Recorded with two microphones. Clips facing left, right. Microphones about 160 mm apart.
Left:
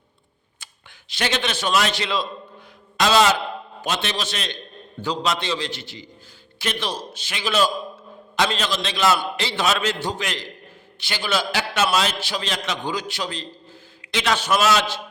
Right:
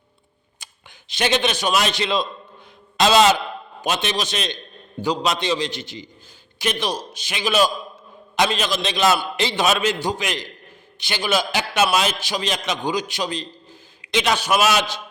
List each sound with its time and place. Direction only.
0.6 s a man's voice: 20° right (ahead or behind)